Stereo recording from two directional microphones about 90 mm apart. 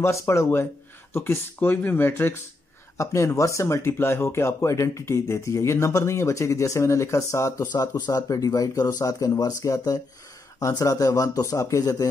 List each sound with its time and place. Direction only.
0.0 s speech: 35° left (ahead or behind)
7.7 s speech: 45° left (ahead or behind)